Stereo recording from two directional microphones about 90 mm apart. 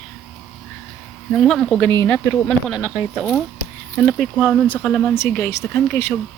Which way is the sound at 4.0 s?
5° left (ahead or behind).